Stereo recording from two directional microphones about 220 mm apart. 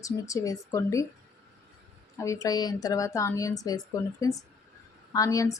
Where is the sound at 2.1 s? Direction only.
15° left (ahead or behind).